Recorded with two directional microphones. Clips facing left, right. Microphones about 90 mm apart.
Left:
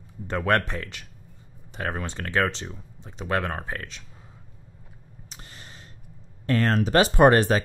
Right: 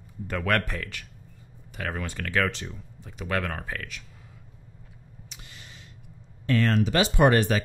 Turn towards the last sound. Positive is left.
turn(degrees=35)  # may be behind; listen again after turning